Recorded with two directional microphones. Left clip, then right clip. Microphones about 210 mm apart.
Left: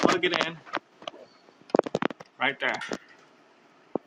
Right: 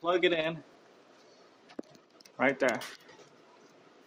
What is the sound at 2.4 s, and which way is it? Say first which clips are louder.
Speech: left 1 dB; 30° right (ahead or behind).